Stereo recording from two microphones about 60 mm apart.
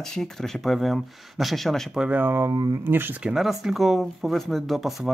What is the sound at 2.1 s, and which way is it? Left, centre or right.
Speech, right.